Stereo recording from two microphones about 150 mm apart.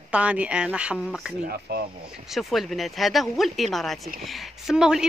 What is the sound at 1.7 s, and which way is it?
Speech, 90° right.